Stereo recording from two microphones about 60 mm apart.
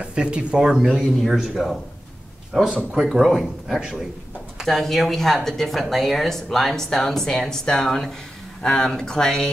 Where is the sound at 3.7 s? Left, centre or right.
Centre.